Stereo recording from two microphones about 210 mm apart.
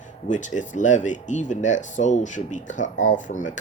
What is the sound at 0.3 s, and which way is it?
Speech, 35° left (ahead or behind).